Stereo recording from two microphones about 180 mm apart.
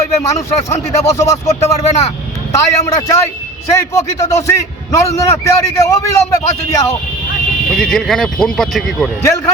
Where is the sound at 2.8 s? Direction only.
15° left (ahead or behind).